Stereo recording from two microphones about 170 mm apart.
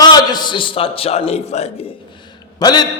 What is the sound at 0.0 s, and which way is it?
A man's voice, 25° left (ahead or behind).